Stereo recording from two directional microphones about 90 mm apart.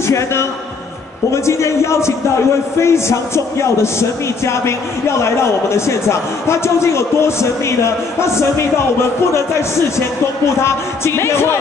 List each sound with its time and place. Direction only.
0.0 s a man's voice: 30° left (ahead or behind)